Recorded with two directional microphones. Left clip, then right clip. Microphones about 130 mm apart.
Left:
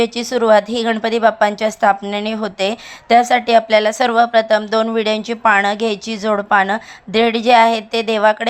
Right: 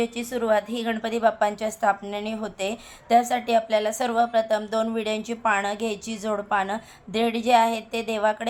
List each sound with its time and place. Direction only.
0.0 s a woman's voice: 35° left (ahead or behind)